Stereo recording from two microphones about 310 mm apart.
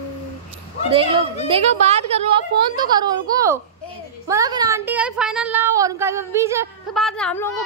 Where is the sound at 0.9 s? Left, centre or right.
Centre.